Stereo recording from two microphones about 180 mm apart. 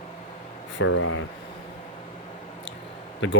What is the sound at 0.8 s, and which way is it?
Speech, 90° left.